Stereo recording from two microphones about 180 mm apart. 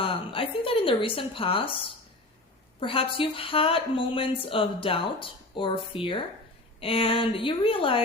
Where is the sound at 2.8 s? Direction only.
30° left (ahead or behind).